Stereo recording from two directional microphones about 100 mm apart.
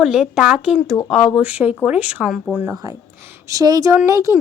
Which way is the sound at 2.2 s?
Centre (ahead or behind).